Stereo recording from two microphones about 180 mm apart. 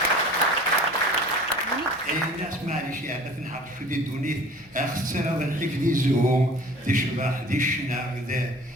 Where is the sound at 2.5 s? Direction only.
50° right (ahead or behind).